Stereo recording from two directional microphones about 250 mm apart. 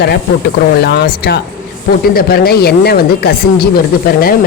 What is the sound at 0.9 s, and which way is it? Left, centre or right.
Speech, left.